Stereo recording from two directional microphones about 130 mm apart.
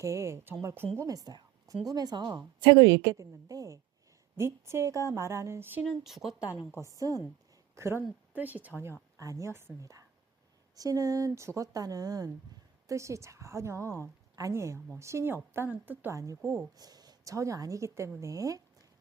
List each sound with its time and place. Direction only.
0.0 s a woman's voice: 25° right (ahead or behind)
5.8 s speech: centre (ahead or behind)
6.7 s a woman's voice: 25° right (ahead or behind)
9.1 s a woman's voice: 25° right (ahead or behind)